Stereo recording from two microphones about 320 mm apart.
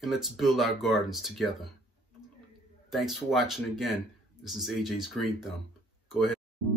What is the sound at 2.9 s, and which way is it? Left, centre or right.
Speech, centre.